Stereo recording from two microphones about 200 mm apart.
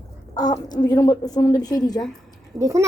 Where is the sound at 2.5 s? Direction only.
15° right (ahead or behind).